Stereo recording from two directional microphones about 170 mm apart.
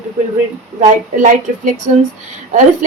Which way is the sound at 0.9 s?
50° right (ahead or behind).